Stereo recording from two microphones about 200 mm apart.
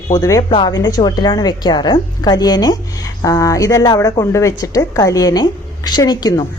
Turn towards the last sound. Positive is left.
turn(degrees=20)  # may be behind; listen again after turning